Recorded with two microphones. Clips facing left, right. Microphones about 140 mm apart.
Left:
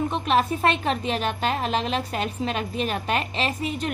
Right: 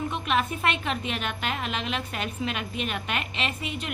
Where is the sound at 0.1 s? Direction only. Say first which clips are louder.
Left 5 dB; 35° left (ahead or behind).